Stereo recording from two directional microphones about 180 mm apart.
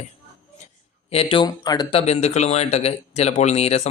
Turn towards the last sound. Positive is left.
turn(degrees=35)  # may be behind; listen again after turning